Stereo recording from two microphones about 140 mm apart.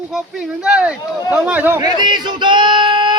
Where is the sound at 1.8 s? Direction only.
30° right (ahead or behind).